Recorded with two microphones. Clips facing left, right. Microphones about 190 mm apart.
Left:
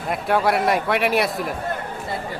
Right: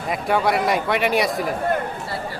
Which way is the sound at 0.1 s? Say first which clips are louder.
Even; centre (ahead or behind).